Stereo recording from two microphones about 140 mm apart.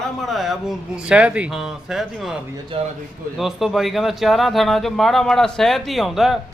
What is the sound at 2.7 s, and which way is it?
Speech, 40° right (ahead or behind).